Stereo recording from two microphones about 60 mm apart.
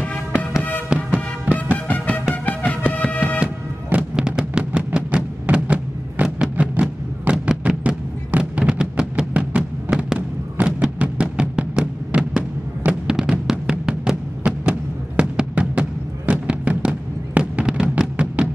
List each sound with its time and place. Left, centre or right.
1.1 s music: right
1.9 s music: left
3.9 s music: centre
12.1 s fireworks: right
13.0 s music: centre